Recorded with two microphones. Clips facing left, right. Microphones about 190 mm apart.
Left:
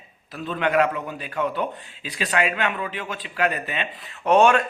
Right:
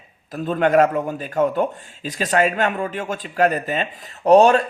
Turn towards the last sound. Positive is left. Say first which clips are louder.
# right 5 dB
turn(degrees=-35)  # may be behind; listen again after turning